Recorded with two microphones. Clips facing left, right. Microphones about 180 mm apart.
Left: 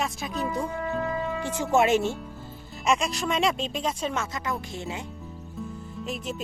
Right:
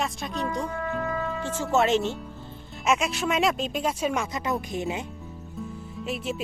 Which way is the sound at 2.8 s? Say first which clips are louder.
Right 1 dB; 5° right (ahead or behind).